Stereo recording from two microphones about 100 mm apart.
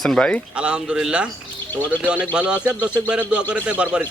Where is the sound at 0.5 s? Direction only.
10° right (ahead or behind).